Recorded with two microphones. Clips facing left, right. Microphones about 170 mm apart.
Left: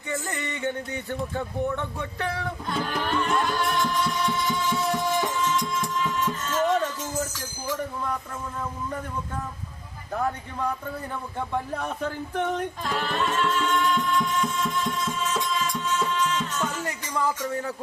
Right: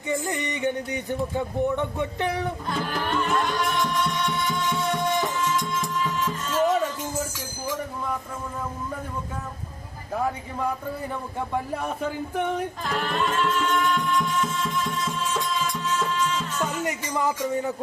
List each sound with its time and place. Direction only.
0.1 s a sound: 15° right (ahead or behind)
2.6 s music: centre (ahead or behind)
11.3 s music: 5° right (ahead or behind)
16.8 s music: 20° right (ahead or behind)